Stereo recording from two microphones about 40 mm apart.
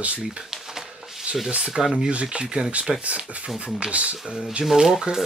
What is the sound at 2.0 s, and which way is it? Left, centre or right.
Speech, right.